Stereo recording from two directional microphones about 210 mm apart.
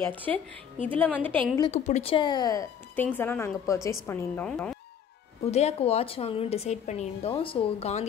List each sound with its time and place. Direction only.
0.1 s a woman's voice: 10° left (ahead or behind)
1.6 s a woman's voice: 30° left (ahead or behind); by 4.7 s 5° left (ahead or behind)
5.4 s a woman's voice: 30° left (ahead or behind)